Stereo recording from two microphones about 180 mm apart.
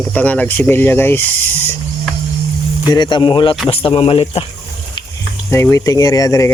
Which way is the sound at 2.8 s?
25° left (ahead or behind).